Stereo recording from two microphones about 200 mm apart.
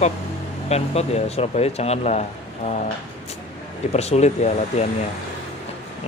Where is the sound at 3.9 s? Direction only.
35° left (ahead or behind).